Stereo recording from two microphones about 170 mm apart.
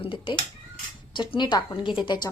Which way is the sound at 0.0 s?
30° left (ahead or behind).